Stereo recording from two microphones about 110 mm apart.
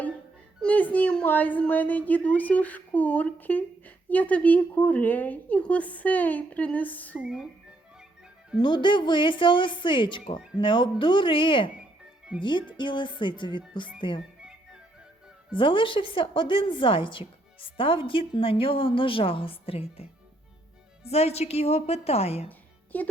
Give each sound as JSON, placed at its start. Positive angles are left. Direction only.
{"t": 0.6, "sound": "a woman's voice", "side_deg": 15}
{"t": 7.2, "sound": "speech", "side_deg": -5}
{"t": 8.6, "sound": "a woman's voice", "side_deg": 45}
{"t": 14.2, "sound": "music", "side_deg": -5}
{"t": 15.5, "sound": "a woman's voice", "side_deg": 50}
{"t": 22.4, "sound": "music", "side_deg": 15}